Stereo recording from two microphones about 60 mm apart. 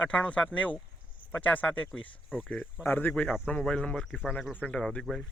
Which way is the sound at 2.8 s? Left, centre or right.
Left.